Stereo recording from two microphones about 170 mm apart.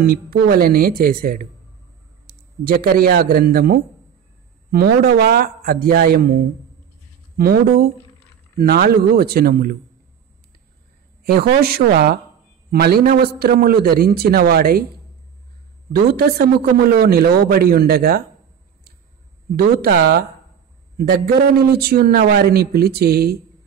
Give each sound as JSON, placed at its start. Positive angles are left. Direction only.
{"t": 0.0, "sound": "a man's voice", "side_deg": -65}
{"t": 7.3, "sound": "a man's voice", "side_deg": -60}
{"t": 11.3, "sound": "a man's voice", "side_deg": -60}
{"t": 15.9, "sound": "a man's voice", "side_deg": -65}
{"t": 19.5, "sound": "speech", "side_deg": -70}
{"t": 21.6, "sound": "a man's voice", "side_deg": -65}